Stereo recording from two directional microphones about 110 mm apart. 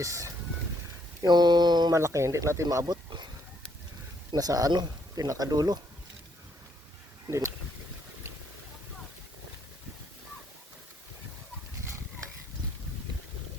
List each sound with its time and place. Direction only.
0.0 s speech: 30° right (ahead or behind)
2.0 s speech: 25° right (ahead or behind)
4.3 s speech: 35° right (ahead or behind)
7.3 s speech: 25° right (ahead or behind)